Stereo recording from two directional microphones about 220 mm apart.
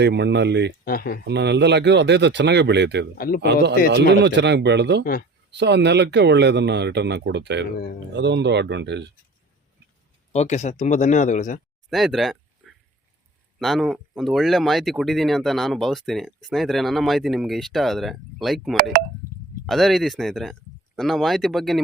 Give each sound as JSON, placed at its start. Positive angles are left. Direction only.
{"t": 0.0, "sound": "speech", "side_deg": -50}
{"t": 0.9, "sound": "speech", "side_deg": 40}
{"t": 1.3, "sound": "speech", "side_deg": -50}
{"t": 3.2, "sound": "speech", "side_deg": 40}
{"t": 3.4, "sound": "speech", "side_deg": -50}
{"t": 10.3, "sound": "speech", "side_deg": 30}
{"t": 11.9, "sound": "a sound", "side_deg": 0}
{"t": 13.6, "sound": "speech", "side_deg": 0}